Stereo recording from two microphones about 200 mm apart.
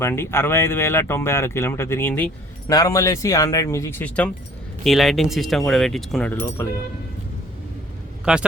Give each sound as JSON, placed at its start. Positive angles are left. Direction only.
{"t": 0.0, "sound": "speech", "side_deg": 10}
{"t": 6.6, "sound": "speech", "side_deg": 15}
{"t": 8.2, "sound": "speech", "side_deg": -5}